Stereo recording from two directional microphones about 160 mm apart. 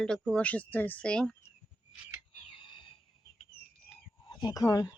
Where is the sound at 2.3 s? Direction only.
35° left (ahead or behind).